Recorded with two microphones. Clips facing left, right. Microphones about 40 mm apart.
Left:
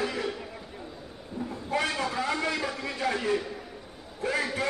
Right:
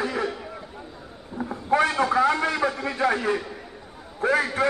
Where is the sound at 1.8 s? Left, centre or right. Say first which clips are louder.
Right 8 dB; right.